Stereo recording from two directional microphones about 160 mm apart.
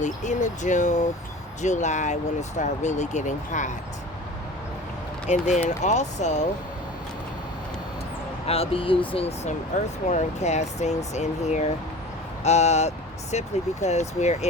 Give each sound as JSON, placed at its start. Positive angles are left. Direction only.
{"t": 0.0, "sound": "speech", "side_deg": 50}
{"t": 5.2, "sound": "speech", "side_deg": 45}
{"t": 8.4, "sound": "speech", "side_deg": 40}